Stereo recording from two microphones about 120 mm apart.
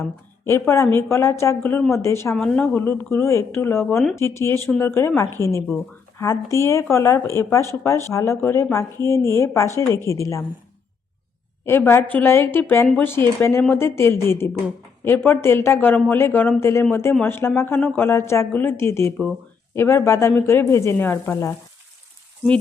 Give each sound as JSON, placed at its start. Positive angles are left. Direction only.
{"t": 0.4, "sound": "speech", "side_deg": 20}
{"t": 2.3, "sound": "speech", "side_deg": 5}
{"t": 2.7, "sound": "speech", "side_deg": 15}
{"t": 11.9, "sound": "speech", "side_deg": 15}